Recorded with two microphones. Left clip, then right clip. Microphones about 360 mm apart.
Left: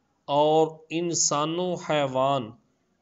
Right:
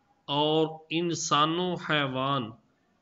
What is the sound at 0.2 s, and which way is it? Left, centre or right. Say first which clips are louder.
A man's voice: left 5 dB; centre.